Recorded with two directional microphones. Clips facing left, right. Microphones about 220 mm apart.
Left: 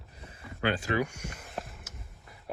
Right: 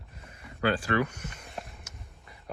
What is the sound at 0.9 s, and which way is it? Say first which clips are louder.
Speech: right 2 dB; 10° left (ahead or behind).